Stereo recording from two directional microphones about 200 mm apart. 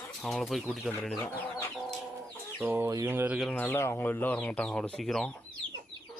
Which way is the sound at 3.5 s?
5° left (ahead or behind).